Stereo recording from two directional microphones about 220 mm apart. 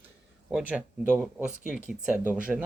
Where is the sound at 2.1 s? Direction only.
5° right (ahead or behind).